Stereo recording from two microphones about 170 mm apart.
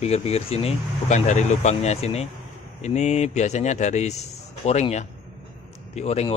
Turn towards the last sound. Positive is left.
turn(degrees=40)  # may be behind; listen again after turning